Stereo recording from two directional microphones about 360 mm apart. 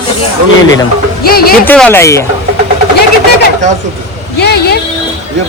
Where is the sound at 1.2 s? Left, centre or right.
Left.